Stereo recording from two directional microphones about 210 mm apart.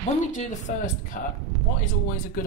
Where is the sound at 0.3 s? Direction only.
35° left (ahead or behind).